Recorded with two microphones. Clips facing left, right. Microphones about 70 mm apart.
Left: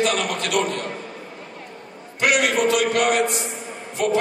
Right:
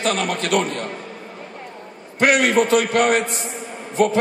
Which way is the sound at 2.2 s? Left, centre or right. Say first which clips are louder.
Right 3 dB; right.